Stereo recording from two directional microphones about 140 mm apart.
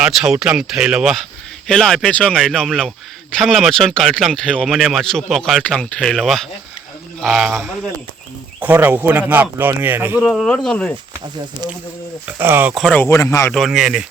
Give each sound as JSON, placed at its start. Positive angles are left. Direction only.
{"t": 0.0, "sound": "speech", "side_deg": -5}
{"t": 10.2, "sound": "speech", "side_deg": 0}
{"t": 12.4, "sound": "speech", "side_deg": -15}
{"t": 12.7, "sound": "speech", "side_deg": 5}
{"t": 13.5, "sound": "speech", "side_deg": 0}